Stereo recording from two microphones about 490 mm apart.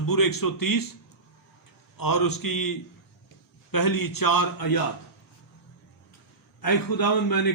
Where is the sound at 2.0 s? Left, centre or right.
Left.